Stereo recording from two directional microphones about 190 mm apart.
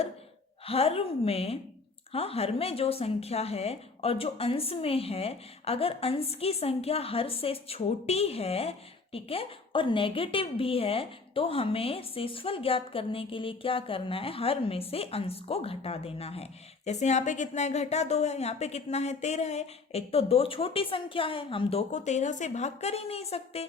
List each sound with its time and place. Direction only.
0.6 s a woman's voice: 30° left (ahead or behind)